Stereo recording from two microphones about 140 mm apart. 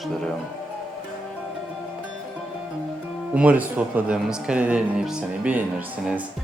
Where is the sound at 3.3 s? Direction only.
10° right (ahead or behind).